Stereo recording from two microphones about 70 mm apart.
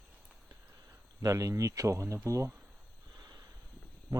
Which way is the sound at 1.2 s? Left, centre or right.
Right.